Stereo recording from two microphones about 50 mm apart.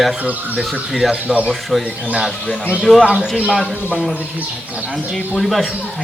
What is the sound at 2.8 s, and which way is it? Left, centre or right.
Speech, centre.